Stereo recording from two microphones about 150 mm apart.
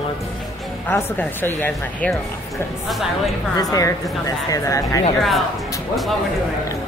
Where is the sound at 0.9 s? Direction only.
15° left (ahead or behind).